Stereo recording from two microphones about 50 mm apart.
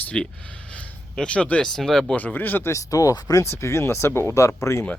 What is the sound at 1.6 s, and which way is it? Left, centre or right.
Speech, centre.